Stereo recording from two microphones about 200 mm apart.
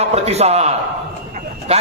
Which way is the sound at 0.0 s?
30° right (ahead or behind).